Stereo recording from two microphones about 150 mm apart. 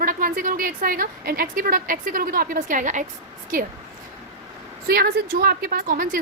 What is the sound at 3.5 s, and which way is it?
Speech, 70° right (ahead or behind).